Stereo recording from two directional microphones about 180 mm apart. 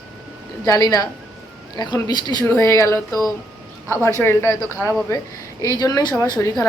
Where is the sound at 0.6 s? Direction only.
20° left (ahead or behind).